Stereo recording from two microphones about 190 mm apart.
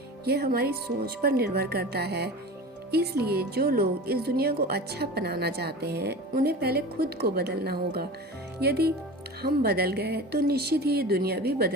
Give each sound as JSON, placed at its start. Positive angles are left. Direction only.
{"t": 0.3, "sound": "speech", "side_deg": -55}